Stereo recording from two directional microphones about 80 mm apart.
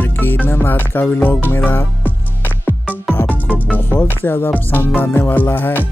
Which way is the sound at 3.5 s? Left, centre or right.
Centre.